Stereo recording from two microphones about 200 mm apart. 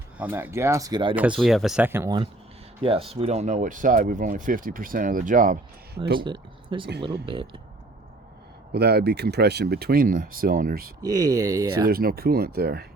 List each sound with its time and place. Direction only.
0.2 s speech: 10° right (ahead or behind)
1.1 s speech: 5° right (ahead or behind)
2.8 s speech: 30° right (ahead or behind)
6.1 s speech: 25° right (ahead or behind)
8.7 s speech: 55° right (ahead or behind)
11.0 s speech: 20° right (ahead or behind)
11.9 s speech: 50° right (ahead or behind)